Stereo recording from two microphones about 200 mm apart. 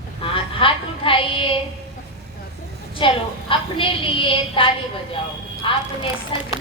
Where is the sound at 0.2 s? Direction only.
25° left (ahead or behind).